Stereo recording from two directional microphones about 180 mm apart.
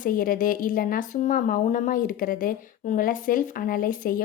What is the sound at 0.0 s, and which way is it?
Speech, 50° left (ahead or behind).